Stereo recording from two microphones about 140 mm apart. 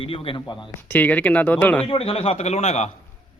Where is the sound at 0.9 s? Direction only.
10° left (ahead or behind).